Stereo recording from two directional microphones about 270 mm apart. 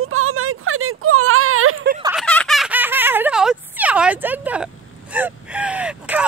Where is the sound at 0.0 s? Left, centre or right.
Right.